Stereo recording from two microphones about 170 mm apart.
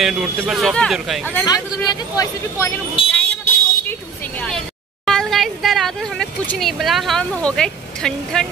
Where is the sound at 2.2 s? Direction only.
15° left (ahead or behind).